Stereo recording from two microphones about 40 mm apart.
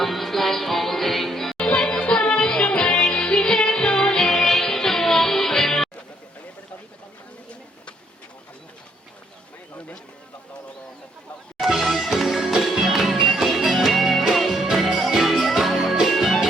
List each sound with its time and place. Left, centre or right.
0.0 s music: centre
1.5 s music: left
11.5 s music: centre